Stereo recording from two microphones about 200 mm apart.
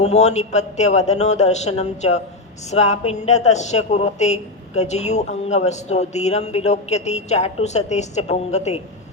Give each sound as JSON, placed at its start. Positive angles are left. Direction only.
{"t": 0.0, "sound": "a woman's voice", "side_deg": 35}